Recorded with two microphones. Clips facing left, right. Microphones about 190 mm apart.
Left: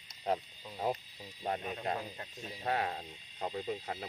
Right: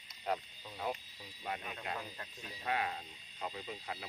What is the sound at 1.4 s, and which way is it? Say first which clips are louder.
Speech: left 6 dB; 40° left (ahead or behind).